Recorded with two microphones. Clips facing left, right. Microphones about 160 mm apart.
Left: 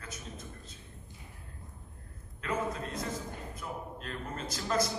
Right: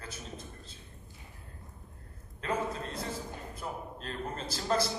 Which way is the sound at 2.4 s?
30° right (ahead or behind).